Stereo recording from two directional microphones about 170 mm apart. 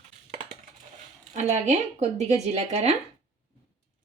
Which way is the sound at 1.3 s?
45° right (ahead or behind).